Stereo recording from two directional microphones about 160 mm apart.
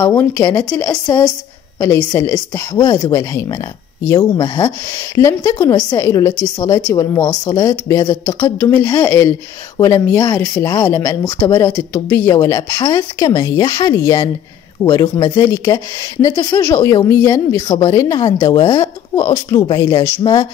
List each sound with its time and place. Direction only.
0.0 s speech: 15° left (ahead or behind)
1.0 s speech: 20° left (ahead or behind)